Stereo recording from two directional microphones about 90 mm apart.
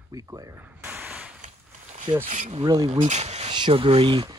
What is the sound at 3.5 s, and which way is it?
Speech, 70° right (ahead or behind).